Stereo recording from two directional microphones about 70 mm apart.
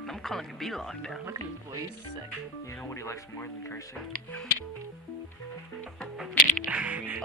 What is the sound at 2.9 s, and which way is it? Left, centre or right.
Speech, left.